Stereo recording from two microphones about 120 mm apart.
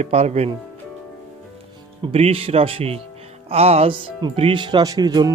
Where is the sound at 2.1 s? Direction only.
55° right (ahead or behind).